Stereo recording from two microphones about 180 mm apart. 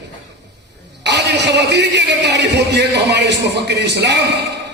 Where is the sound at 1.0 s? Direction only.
75° right (ahead or behind).